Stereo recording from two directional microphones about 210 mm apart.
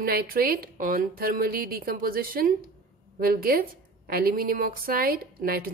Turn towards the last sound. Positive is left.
turn(degrees=-45)  # may be behind; listen again after turning